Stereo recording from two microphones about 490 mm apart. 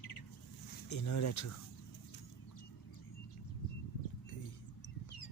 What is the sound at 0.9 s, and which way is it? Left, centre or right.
Speech, left.